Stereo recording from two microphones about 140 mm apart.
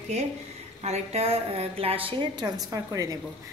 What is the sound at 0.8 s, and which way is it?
A woman's voice, 50° right (ahead or behind).